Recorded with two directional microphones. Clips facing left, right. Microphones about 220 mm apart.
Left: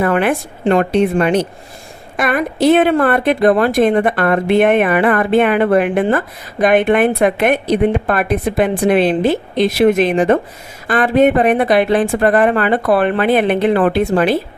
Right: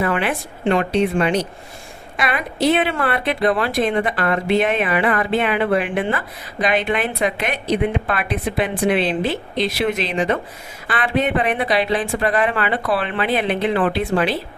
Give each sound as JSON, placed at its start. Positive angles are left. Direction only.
{"t": 0.0, "sound": "speech", "side_deg": 50}